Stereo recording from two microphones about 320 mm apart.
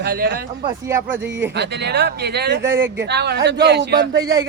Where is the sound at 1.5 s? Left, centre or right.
Right.